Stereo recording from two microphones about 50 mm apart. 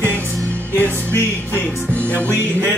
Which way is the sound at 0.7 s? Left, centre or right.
Left.